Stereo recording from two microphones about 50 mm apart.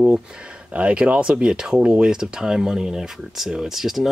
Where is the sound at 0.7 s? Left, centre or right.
Right.